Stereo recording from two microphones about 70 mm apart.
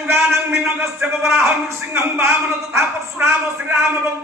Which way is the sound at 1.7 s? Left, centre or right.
Right.